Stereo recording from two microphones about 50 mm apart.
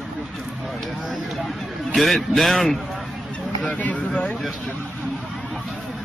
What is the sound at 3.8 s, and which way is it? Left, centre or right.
Speech, left.